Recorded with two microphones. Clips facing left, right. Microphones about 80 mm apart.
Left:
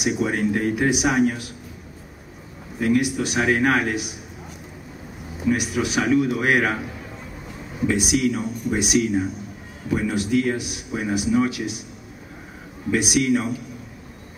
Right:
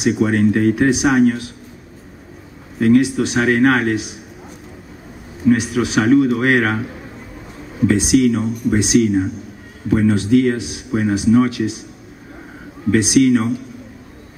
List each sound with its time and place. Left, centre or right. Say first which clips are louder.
0.0 s speech: right 6 dB; right
0.3 s speech: right 7 dB; right
0.7 s speech: right 6 dB; right
2.8 s speech: right 7 dB; right
3.3 s speech: right 5 dB; right
3.6 s speech: right 6 dB; right
5.4 s speech: right 7 dB; right
6.0 s speech: right 7 dB; right
7.9 s speech: right 7 dB; right
12.9 s speech: right 7 dB; right
13.3 s speech: right 5 dB; right